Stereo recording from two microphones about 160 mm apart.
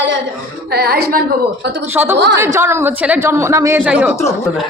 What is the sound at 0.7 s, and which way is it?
Speech, 85° right.